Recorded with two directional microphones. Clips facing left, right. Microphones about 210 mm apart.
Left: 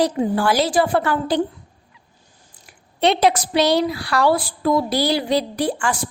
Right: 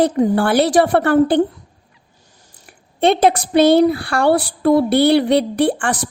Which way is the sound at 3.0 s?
50° right (ahead or behind).